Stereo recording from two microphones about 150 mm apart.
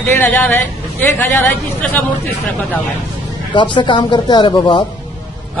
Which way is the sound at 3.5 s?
30° left (ahead or behind).